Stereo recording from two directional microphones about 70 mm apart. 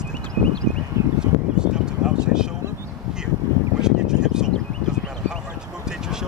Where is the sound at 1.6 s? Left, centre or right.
Centre.